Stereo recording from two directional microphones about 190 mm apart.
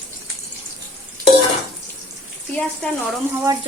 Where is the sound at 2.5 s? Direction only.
5° left (ahead or behind).